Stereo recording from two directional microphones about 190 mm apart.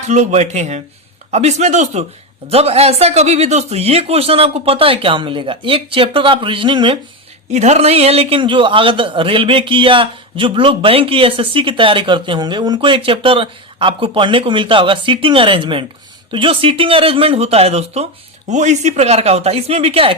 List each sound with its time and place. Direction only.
0.1 s speech: 40° right (ahead or behind)
7.5 s a man's voice: 35° right (ahead or behind)